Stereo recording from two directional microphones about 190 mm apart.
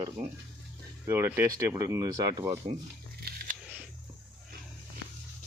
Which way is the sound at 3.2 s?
50° right (ahead or behind).